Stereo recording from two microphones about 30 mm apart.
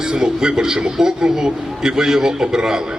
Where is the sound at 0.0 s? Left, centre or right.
Right.